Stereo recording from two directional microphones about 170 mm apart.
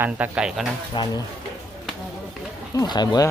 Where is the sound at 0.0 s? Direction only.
5° right (ahead or behind).